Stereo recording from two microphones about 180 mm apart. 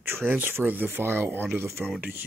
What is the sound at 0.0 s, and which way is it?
Speech, 10° right (ahead or behind).